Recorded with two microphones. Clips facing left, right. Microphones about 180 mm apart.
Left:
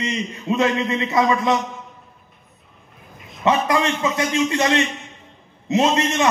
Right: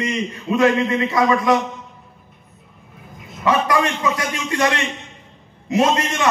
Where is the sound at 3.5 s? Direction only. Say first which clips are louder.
Even; 25° left (ahead or behind).